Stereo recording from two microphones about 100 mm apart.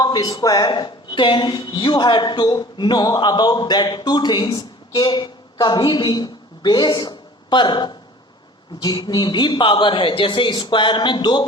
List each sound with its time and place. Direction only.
0.0 s a woman's voice: 40° left (ahead or behind)